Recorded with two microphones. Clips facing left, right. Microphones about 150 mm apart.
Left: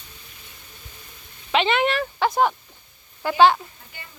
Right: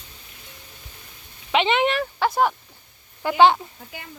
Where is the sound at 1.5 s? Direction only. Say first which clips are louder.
Even; 20° right (ahead or behind).